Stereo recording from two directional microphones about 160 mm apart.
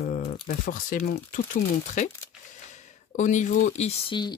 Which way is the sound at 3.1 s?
50° left (ahead or behind).